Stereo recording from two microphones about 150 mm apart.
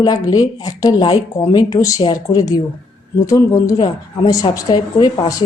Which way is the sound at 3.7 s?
30° left (ahead or behind).